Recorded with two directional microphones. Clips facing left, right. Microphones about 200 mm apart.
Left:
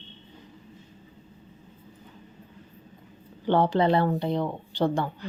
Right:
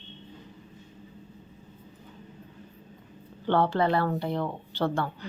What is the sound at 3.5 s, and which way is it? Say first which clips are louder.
A woman's voice: left 2 dB; 15° left (ahead or behind).